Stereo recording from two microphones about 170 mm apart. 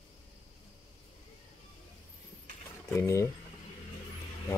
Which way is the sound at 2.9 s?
15° left (ahead or behind).